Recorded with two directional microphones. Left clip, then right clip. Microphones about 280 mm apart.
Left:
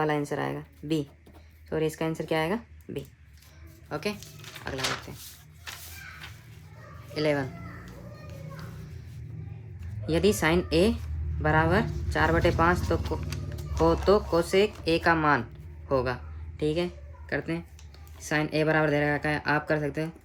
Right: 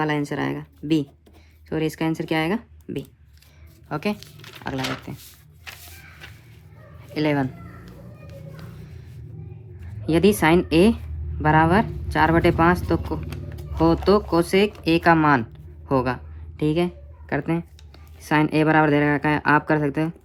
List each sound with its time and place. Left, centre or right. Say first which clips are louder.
0.0 s speech: right 4 dB; right
3.8 s speech: right 5 dB; centre
7.1 s speech: right 4 dB; centre
10.1 s speech: right 7 dB; centre
15.9 s a sound: right 5 dB; centre
18.2 s speech: right 7 dB; centre